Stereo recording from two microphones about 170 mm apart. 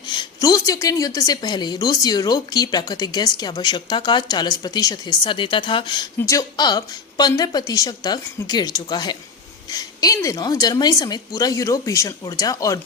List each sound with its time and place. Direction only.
0.1 s a woman's voice: 25° left (ahead or behind)